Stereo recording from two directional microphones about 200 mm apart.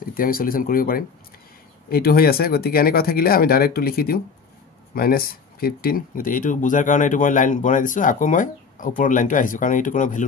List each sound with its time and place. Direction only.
0.0 s speech: 45° left (ahead or behind)